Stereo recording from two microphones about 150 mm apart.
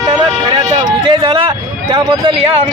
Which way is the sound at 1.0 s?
30° right (ahead or behind).